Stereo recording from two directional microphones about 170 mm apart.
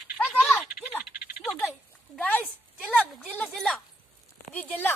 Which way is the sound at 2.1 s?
5° left (ahead or behind).